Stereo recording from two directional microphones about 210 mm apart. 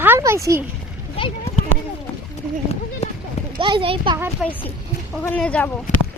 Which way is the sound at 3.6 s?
25° right (ahead or behind).